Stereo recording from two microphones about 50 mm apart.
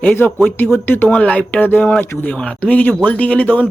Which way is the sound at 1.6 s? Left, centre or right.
Left.